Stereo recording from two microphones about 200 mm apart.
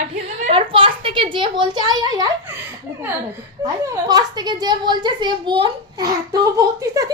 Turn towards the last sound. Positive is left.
turn(degrees=-15)  # may be behind; listen again after turning